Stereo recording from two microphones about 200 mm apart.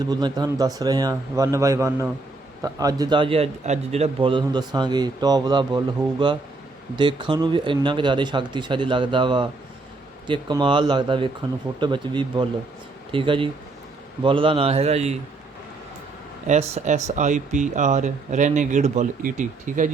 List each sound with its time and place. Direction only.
0.0 s a man's voice: 20° right (ahead or behind)
16.5 s speech: 35° right (ahead or behind)